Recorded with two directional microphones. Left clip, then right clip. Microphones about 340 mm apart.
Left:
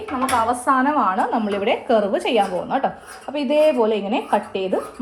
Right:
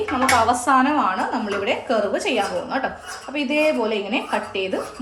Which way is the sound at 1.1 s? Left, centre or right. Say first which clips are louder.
Left 2 dB; centre.